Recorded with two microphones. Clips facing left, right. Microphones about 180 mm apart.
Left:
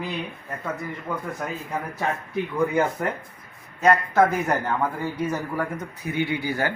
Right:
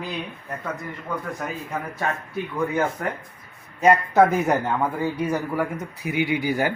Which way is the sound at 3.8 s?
15° right (ahead or behind).